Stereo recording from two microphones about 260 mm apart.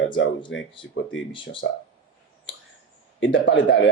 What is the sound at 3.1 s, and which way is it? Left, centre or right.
Speech, left.